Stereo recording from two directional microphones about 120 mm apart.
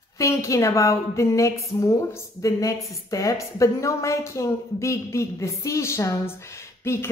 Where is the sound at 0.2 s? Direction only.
25° left (ahead or behind).